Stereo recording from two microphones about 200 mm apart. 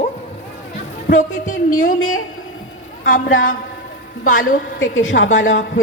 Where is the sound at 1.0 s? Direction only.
45° left (ahead or behind).